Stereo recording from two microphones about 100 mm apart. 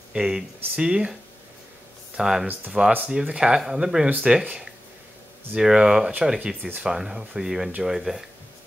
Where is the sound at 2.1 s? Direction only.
5° right (ahead or behind).